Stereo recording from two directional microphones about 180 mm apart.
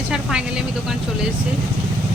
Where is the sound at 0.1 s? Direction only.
5° right (ahead or behind).